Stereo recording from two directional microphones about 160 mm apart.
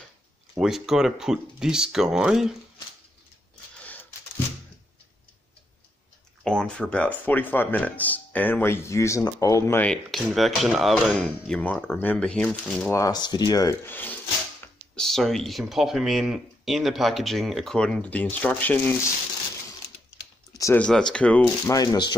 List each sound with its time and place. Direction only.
0.6 s speech: centre (ahead or behind)
3.8 s a sound: 10° left (ahead or behind)
6.4 s speech: 5° left (ahead or behind)
10.1 s speech: centre (ahead or behind)
12.9 s speech: 25° left (ahead or behind)
20.5 s speech: 20° left (ahead or behind)
20.8 s speech: 5° left (ahead or behind)
21.7 s speech: 25° left (ahead or behind)